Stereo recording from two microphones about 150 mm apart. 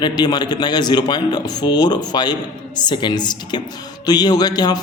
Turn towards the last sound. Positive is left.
turn(degrees=25)  # may be behind; listen again after turning